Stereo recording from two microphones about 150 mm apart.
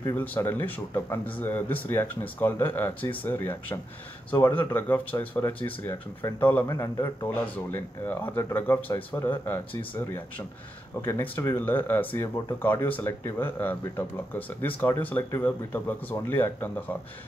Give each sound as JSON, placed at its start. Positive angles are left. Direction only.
{"t": 0.0, "sound": "speech", "side_deg": 10}